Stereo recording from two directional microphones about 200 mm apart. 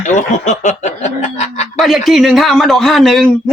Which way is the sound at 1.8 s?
Centre (ahead or behind).